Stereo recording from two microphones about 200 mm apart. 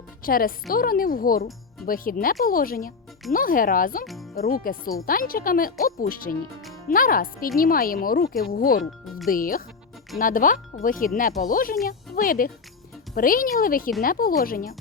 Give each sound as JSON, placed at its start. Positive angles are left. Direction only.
{"t": 0.2, "sound": "a woman's voice", "side_deg": 45}
{"t": 4.0, "sound": "speech", "side_deg": 0}
{"t": 4.4, "sound": "speech", "side_deg": 45}
{"t": 8.3, "sound": "speech", "side_deg": 0}
{"t": 8.5, "sound": "speech", "side_deg": 45}
{"t": 8.8, "sound": "speech", "side_deg": 0}
{"t": 9.3, "sound": "speech", "side_deg": 45}
{"t": 11.9, "sound": "music", "side_deg": 45}
{"t": 13.1, "sound": "speech", "side_deg": 45}